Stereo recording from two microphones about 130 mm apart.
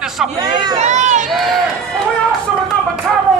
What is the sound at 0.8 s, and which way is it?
Speech, 65° right (ahead or behind).